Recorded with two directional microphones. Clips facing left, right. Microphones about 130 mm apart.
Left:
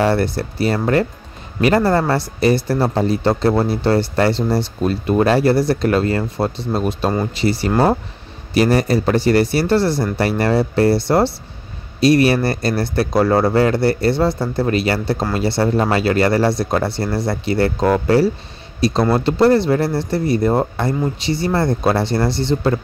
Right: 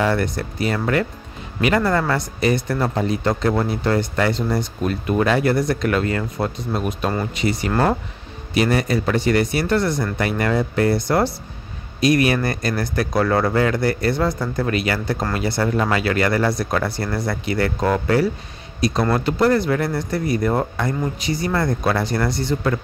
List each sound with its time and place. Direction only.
0.0 s speech: 35° left (ahead or behind)